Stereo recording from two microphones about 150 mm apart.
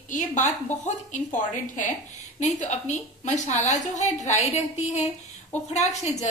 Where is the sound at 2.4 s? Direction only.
50° left (ahead or behind).